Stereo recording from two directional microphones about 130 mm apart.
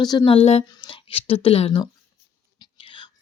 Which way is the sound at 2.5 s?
40° left (ahead or behind).